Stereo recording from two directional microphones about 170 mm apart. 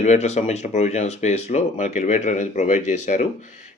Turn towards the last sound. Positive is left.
turn(degrees=45)  # may be behind; listen again after turning